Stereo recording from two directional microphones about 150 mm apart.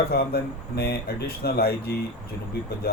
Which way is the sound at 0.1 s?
90° left.